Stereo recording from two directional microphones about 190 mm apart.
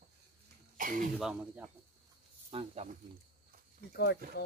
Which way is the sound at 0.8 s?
45° right (ahead or behind).